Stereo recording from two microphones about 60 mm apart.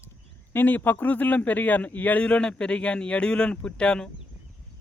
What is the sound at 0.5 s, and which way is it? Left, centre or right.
A man's voice, left.